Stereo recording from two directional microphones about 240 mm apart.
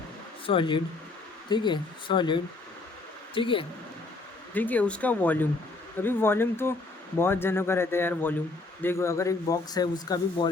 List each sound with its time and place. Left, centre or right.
0.4 s speech: left
4.5 s speech: centre